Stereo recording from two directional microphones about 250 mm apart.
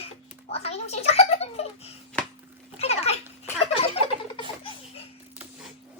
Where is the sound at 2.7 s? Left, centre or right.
Left.